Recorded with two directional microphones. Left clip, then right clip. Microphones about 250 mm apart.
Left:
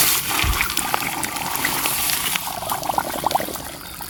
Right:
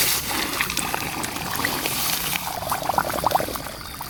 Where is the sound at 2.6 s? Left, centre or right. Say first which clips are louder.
Right 1 dB; centre.